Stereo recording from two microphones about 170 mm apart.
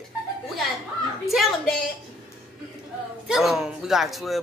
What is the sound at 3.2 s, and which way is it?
A man's voice, centre (ahead or behind).